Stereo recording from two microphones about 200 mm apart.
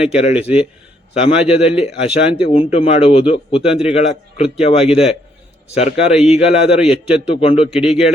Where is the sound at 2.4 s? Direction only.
30° left (ahead or behind).